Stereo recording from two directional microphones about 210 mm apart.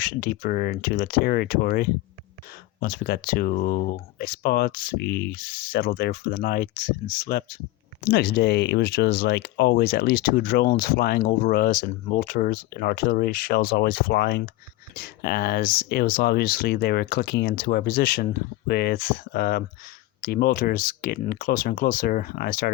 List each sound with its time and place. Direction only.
0.0 s speech: 45° left (ahead or behind)